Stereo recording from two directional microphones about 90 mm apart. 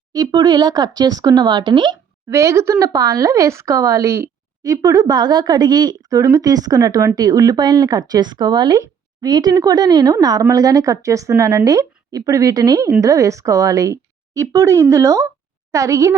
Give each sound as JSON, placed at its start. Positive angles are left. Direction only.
{"t": 0.1, "sound": "speech", "side_deg": -45}
{"t": 2.3, "sound": "a woman's voice", "side_deg": -35}